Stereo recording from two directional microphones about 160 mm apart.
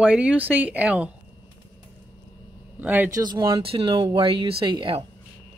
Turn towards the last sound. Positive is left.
turn(degrees=-30)  # may be behind; listen again after turning